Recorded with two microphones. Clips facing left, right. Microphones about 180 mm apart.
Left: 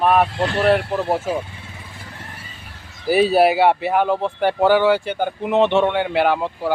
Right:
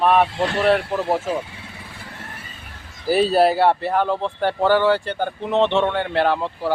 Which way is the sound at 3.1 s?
5° left (ahead or behind).